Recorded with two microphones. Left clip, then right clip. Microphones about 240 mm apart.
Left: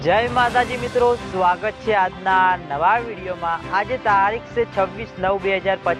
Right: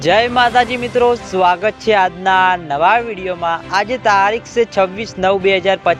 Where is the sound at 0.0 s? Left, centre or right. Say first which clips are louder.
Right 5 dB; right.